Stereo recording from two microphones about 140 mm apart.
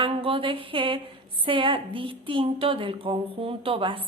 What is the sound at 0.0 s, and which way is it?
A woman's voice, 40° right (ahead or behind).